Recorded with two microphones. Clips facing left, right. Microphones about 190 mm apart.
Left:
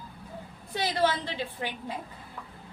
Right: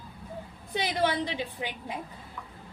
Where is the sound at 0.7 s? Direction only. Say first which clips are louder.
Left 1 dB; 20° right (ahead or behind).